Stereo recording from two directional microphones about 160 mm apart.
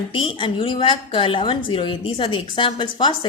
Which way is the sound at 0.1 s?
35° left (ahead or behind).